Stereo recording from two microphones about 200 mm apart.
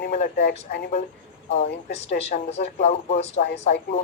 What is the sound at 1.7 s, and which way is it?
Speech, 60° left (ahead or behind).